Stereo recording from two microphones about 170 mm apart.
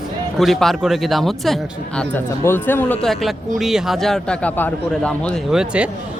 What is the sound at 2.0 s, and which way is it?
Speech, 10° left (ahead or behind).